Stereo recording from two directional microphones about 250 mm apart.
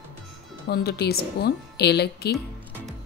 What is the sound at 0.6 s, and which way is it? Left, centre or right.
A woman's voice, left.